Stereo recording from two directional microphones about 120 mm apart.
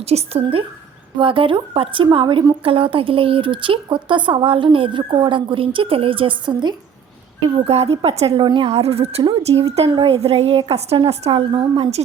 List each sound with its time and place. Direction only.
0.0 s a woman's voice: 60° right (ahead or behind)
1.2 s speech: 45° right (ahead or behind)
7.5 s a woman's voice: 60° right (ahead or behind)
8.4 s a woman's voice: 40° right (ahead or behind)
8.7 s a woman's voice: 60° right (ahead or behind)